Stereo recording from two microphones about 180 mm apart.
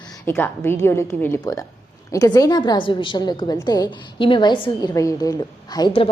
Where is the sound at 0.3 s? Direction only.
10° left (ahead or behind).